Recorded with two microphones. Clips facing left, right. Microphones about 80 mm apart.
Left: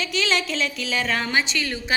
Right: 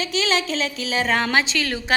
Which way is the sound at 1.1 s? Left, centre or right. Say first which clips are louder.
Right 3 dB; right.